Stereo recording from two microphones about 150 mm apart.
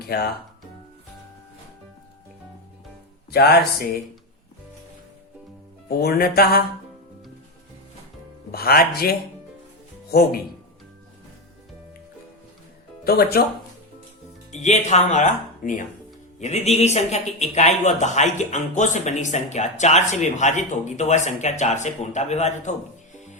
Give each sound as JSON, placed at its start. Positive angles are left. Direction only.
{"t": 0.1, "sound": "speech", "side_deg": 90}
{"t": 3.3, "sound": "speech", "side_deg": 90}
{"t": 5.9, "sound": "speech", "side_deg": 90}
{"t": 8.5, "sound": "speech", "side_deg": 90}
{"t": 13.1, "sound": "speech", "side_deg": 90}
{"t": 14.5, "sound": "speech", "side_deg": 50}
{"t": 16.4, "sound": "speech", "side_deg": 50}
{"t": 23.1, "sound": "music", "side_deg": 50}